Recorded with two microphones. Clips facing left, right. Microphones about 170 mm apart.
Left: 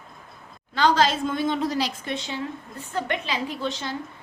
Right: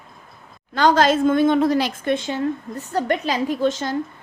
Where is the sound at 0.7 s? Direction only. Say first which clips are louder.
Right 4 dB; 45° right (ahead or behind).